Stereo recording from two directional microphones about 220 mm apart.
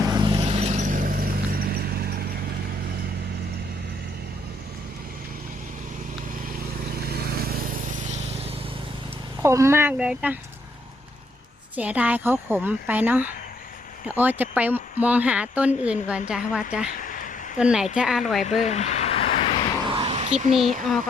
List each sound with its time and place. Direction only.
0.1 s vehicle: 20° right (ahead or behind); by 2.2 s 45° right (ahead or behind)
7.1 s vehicle: 45° right (ahead or behind)
9.4 s speech: 10° right (ahead or behind)
11.8 s speech: 5° right (ahead or behind)
17.0 s a sound: 40° left (ahead or behind)
17.6 s speech: 5° right (ahead or behind)
18.6 s a sound: 30° left (ahead or behind)
20.0 s a sound: 25° right (ahead or behind)
20.5 s speech: centre (ahead or behind)